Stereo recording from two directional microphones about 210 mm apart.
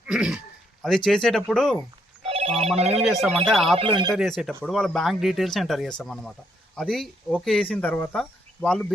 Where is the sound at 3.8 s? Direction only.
25° right (ahead or behind).